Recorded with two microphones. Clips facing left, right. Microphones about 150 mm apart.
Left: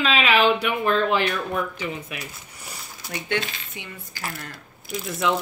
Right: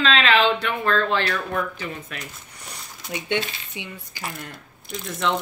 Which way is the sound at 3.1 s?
20° right (ahead or behind).